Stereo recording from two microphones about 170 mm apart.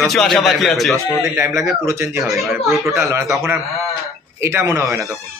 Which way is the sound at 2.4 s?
Centre (ahead or behind).